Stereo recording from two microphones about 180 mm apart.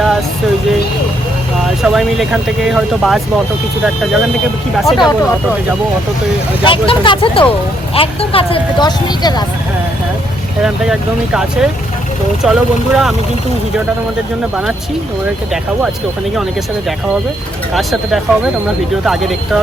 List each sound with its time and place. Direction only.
1.6 s speech: centre (ahead or behind)
4.9 s speech: 25° left (ahead or behind)
6.7 s speech: 25° left (ahead or behind)
12.4 s speech: centre (ahead or behind)
19.0 s speech: centre (ahead or behind)